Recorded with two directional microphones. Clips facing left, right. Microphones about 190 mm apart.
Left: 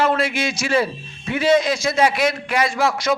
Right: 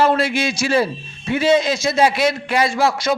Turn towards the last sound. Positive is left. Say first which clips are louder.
# right 2 dB
turn(degrees=-30)  # may be behind; listen again after turning